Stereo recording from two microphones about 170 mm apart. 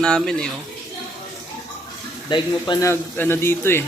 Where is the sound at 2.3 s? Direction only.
25° left (ahead or behind).